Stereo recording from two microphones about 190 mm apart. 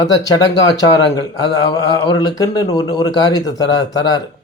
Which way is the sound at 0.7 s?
20° left (ahead or behind).